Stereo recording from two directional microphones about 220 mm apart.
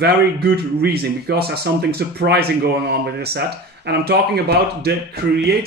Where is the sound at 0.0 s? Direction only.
45° right (ahead or behind).